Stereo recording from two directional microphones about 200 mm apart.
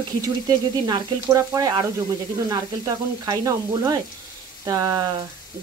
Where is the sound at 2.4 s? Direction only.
20° right (ahead or behind).